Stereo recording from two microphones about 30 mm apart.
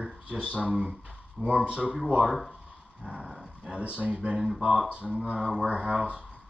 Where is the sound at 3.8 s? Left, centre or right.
Right.